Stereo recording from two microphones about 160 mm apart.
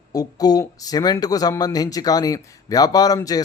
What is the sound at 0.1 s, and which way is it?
Speech, 25° left (ahead or behind).